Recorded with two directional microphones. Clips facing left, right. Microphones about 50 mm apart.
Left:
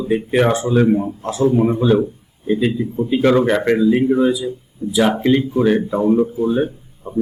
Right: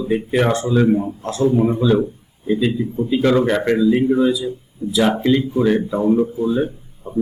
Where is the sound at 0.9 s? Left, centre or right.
Centre.